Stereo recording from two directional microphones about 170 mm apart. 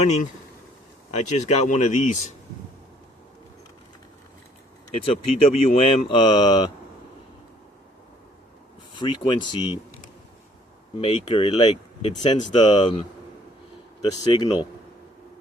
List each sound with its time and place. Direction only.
0.0 s speech: 40° left (ahead or behind)
5.4 s speech: 35° left (ahead or behind)
9.0 s speech: 25° left (ahead or behind)
10.9 s speech: 30° left (ahead or behind)
14.1 s speech: 30° left (ahead or behind)